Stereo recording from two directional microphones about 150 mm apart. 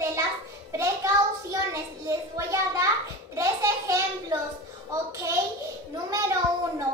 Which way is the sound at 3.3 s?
20° right (ahead or behind).